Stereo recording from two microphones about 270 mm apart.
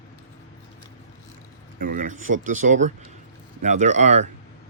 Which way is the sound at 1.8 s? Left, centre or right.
Right.